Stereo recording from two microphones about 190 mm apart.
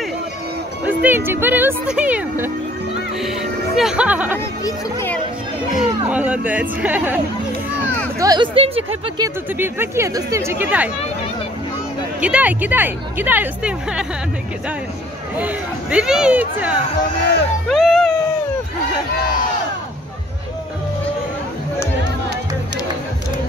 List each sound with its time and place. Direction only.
0.8 s speech: 10° right (ahead or behind)
3.7 s speech: 5° right (ahead or behind)
4.6 s speech: 10° left (ahead or behind)
6.0 s speech: 5° right (ahead or behind)
8.2 s a woman's voice: 20° right (ahead or behind)
9.6 s speech: 15° right (ahead or behind)
12.2 s speech: 5° right (ahead or behind)
15.3 s speech: 5° right (ahead or behind)
17.6 s a sound: centre (ahead or behind)